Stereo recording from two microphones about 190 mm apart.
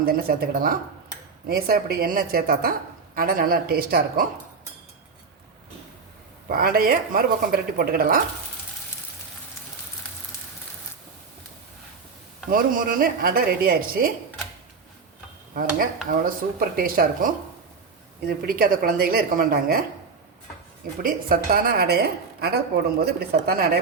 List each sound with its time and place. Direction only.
0.0 s speech: 55° right (ahead or behind)
6.5 s speech: 50° right (ahead or behind)
12.5 s speech: 50° right (ahead or behind)
15.5 s speech: 50° right (ahead or behind)
21.0 s speech: 50° right (ahead or behind)